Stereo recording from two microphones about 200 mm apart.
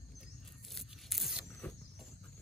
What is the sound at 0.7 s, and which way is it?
Tearing, centre (ahead or behind).